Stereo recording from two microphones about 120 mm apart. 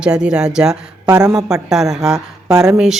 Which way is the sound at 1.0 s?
30° right (ahead or behind).